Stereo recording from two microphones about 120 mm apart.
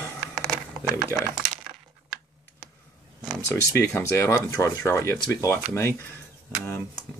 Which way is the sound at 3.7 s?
20° left (ahead or behind).